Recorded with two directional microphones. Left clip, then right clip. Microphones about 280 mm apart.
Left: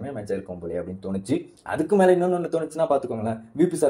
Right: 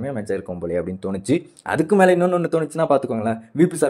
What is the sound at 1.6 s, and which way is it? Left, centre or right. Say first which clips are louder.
Speech: right 3 dB; right.